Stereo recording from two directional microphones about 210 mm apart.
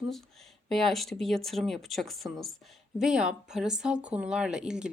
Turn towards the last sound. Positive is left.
turn(degrees=-5)  # may be behind; listen again after turning